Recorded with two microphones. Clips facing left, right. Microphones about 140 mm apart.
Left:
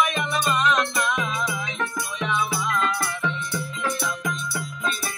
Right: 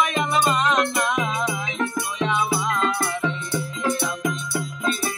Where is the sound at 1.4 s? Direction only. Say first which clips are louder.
Right 3 dB; 25° right (ahead or behind).